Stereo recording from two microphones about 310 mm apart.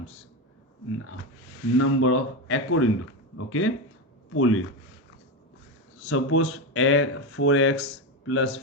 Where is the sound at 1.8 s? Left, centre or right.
Left.